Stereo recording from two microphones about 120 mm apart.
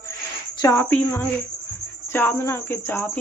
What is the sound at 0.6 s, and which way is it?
Speech, 25° left (ahead or behind).